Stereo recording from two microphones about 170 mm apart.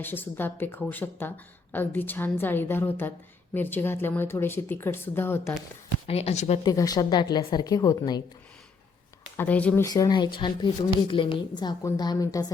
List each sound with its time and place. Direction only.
0.0 s speech: 10° left (ahead or behind)
6.1 s speech: 35° left (ahead or behind)
6.7 s a woman's voice: 20° left (ahead or behind)
9.4 s speech: 10° left (ahead or behind)
9.8 s a woman's voice: 20° left (ahead or behind)